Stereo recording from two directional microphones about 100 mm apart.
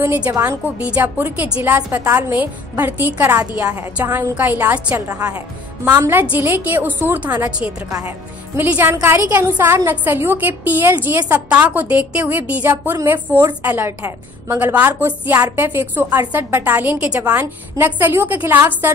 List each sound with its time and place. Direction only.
0.3 s a woman's voice: 30° right (ahead or behind)
0.7 s a woman's voice: 15° right (ahead or behind)
4.9 s a woman's voice: 30° right (ahead or behind)